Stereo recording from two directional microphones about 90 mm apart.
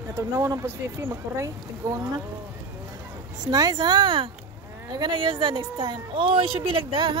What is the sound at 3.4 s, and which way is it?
Speech, 45° right (ahead or behind).